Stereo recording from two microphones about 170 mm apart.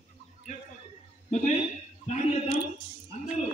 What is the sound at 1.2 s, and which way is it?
Speech, 45° left (ahead or behind).